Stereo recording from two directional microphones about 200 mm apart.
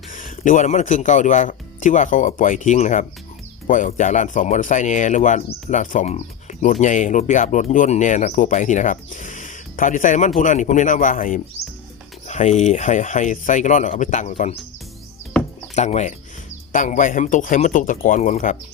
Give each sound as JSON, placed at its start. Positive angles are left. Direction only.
{"t": 0.1, "sound": "speech", "side_deg": 40}
{"t": 15.7, "sound": "speech", "side_deg": 35}